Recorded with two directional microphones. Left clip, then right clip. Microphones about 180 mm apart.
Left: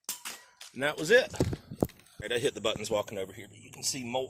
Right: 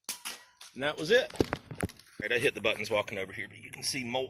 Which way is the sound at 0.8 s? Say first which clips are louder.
Left 2 dB; 45° left (ahead or behind).